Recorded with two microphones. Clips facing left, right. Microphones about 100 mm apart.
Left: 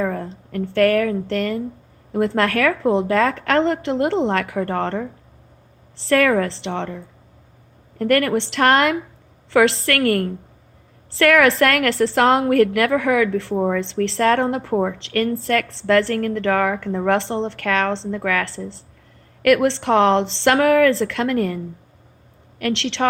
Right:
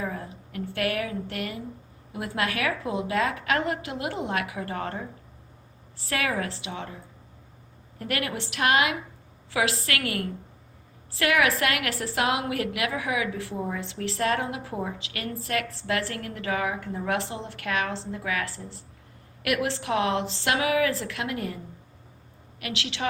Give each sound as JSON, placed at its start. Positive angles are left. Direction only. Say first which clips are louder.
{"t": 0.0, "sound": "a sound", "louder": "left 9 dB", "side_deg": 55}
{"t": 0.5, "sound": "a woman's voice", "louder": "left 12 dB", "side_deg": 50}
{"t": 6.1, "sound": "a woman's voice", "louder": "left 12 dB", "side_deg": 55}
{"t": 6.7, "sound": "a woman's voice", "louder": "left 10 dB", "side_deg": 75}
{"t": 7.9, "sound": "a woman's voice", "louder": "left 13 dB", "side_deg": 55}
{"t": 8.4, "sound": "a woman's voice", "louder": "left 7 dB", "side_deg": 70}
{"t": 11.2, "sound": "a woman's voice", "louder": "left 9 dB", "side_deg": 60}
{"t": 15.4, "sound": "a woman's voice", "louder": "left 9 dB", "side_deg": 75}
{"t": 18.1, "sound": "a woman's voice", "louder": "left 8 dB", "side_deg": 60}
{"t": 19.4, "sound": "a woman's voice", "louder": "left 12 dB", "side_deg": 55}
{"t": 19.6, "sound": "a woman's voice", "louder": "left 10 dB", "side_deg": 75}
{"t": 22.6, "sound": "a woman's voice", "louder": "left 11 dB", "side_deg": 60}